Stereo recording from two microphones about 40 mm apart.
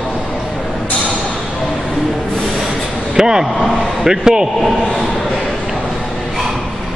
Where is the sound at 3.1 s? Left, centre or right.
Centre.